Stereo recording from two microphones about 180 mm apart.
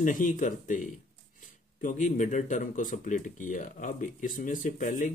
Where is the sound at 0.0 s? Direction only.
45° left (ahead or behind).